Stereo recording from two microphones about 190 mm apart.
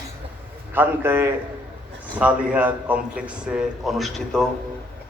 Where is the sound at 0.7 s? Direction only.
10° right (ahead or behind).